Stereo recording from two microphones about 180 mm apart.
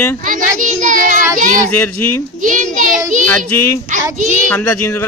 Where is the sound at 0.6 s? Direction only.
45° right (ahead or behind).